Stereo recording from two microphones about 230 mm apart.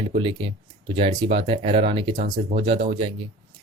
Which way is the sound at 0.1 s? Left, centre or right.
Right.